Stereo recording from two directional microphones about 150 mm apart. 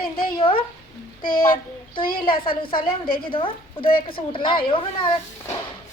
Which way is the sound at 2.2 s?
35° left (ahead or behind).